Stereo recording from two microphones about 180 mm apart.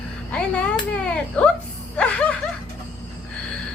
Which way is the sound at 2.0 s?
5° left (ahead or behind).